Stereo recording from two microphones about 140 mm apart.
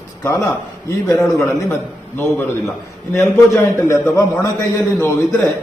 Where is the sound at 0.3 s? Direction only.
20° left (ahead or behind).